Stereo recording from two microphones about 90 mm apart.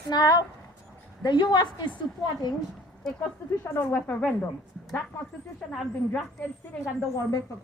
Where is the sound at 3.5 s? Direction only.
30° left (ahead or behind).